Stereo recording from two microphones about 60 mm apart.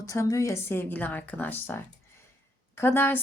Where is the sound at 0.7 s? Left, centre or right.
Left.